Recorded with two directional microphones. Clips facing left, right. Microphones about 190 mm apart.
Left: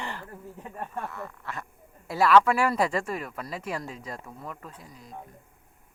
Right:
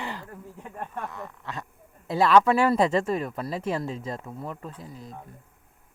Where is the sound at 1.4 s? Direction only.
20° right (ahead or behind).